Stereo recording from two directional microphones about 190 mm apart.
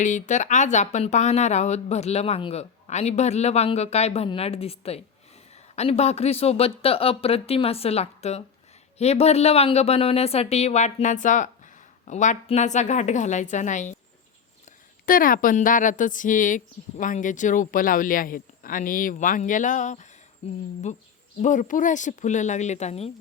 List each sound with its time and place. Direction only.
0.0 s speech: 40° left (ahead or behind)
15.0 s speech: 45° left (ahead or behind)
21.4 s speech: 40° left (ahead or behind)